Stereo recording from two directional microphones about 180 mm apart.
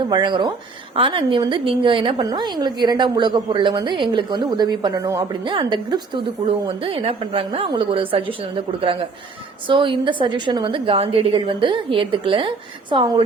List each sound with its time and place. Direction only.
0.1 s a woman's voice: 25° right (ahead or behind)